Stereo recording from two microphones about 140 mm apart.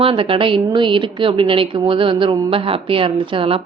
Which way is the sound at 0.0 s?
40° right (ahead or behind).